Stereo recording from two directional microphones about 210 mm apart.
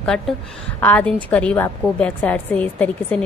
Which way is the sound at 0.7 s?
10° left (ahead or behind).